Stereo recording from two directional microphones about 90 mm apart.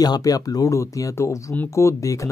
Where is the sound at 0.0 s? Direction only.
45° left (ahead or behind).